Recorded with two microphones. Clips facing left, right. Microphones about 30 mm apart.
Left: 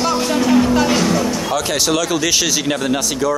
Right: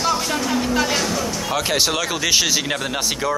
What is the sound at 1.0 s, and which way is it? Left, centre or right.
Music, centre.